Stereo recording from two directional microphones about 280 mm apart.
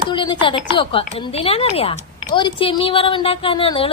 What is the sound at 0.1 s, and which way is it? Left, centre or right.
A woman's voice, centre.